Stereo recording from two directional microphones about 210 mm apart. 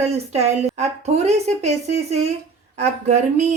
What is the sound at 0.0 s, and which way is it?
A woman's voice, 30° right (ahead or behind).